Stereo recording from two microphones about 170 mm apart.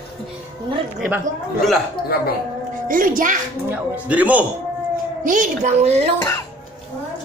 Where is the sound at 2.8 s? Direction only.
55° right (ahead or behind).